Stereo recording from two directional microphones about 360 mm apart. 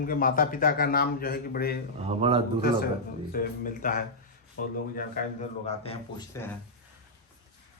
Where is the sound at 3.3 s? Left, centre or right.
Left.